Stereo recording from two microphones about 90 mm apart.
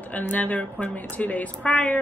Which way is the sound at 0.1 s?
20° left (ahead or behind).